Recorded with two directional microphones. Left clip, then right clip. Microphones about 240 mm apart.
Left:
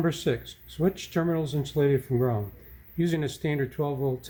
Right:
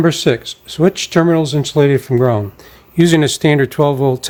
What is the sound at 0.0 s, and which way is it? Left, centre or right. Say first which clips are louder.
Speech: right 14 dB; right.